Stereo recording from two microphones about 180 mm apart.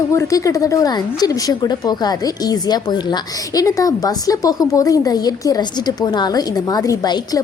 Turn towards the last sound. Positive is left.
turn(degrees=20)  # may be behind; listen again after turning